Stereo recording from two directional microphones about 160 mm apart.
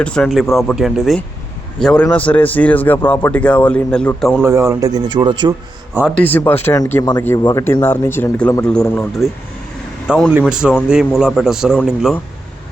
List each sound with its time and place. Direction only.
0.0 s a man's voice: 5° left (ahead or behind)
4.4 s speech: 15° right (ahead or behind)
5.9 s speech: 10° right (ahead or behind)
6.2 s a man's voice: 10° left (ahead or behind); by 11.8 s 5° right (ahead or behind)